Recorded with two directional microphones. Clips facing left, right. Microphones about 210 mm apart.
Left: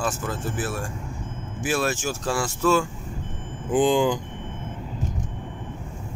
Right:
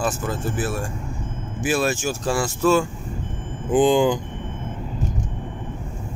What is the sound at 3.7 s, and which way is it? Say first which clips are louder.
Speech: right 3 dB; 25° right (ahead or behind).